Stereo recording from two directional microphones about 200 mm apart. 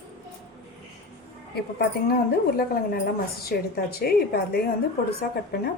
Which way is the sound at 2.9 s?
50° left (ahead or behind).